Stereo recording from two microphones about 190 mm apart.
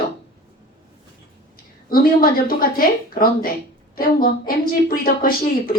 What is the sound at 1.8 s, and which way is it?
Speech, 50° left (ahead or behind).